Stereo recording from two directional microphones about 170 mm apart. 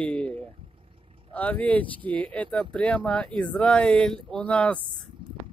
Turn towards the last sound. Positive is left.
turn(degrees=5)  # may be behind; listen again after turning